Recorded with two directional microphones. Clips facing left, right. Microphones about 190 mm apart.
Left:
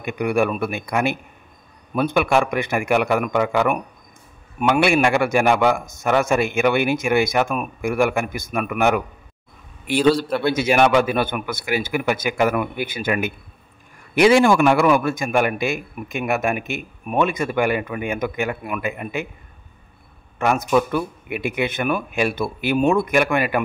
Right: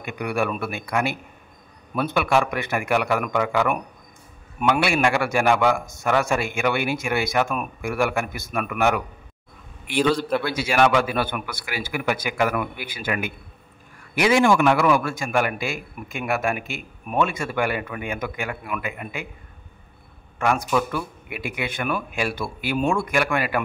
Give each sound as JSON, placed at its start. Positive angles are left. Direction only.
{"t": 0.0, "sound": "a man's voice", "side_deg": 15}
{"t": 10.4, "sound": "a man's voice", "side_deg": 20}
{"t": 20.3, "sound": "a man's voice", "side_deg": 20}